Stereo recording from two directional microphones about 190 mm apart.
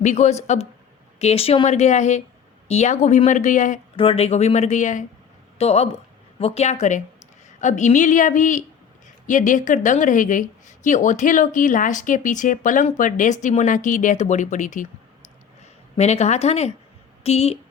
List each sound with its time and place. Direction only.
0.0 s speech: 35° left (ahead or behind)
3.9 s speech: 30° left (ahead or behind)